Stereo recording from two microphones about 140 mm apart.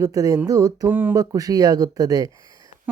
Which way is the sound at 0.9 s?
15° right (ahead or behind).